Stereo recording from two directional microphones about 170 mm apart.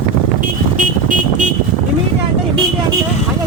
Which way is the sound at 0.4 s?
50° right (ahead or behind).